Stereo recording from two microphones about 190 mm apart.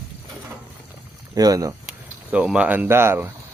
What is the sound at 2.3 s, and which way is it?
Speech, 5° right (ahead or behind).